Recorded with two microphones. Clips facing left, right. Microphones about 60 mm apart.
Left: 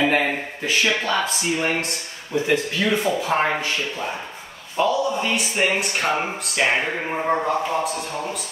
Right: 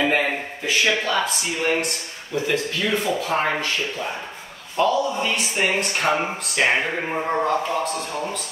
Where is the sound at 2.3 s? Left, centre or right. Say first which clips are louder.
Left 2 dB; left.